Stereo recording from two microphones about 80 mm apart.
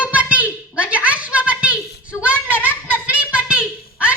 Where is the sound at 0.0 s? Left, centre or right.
Centre.